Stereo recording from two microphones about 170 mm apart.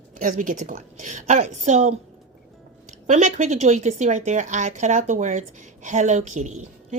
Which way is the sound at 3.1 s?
45° right (ahead or behind).